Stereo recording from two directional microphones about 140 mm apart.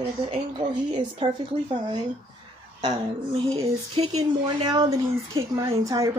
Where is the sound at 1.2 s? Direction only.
40° right (ahead or behind).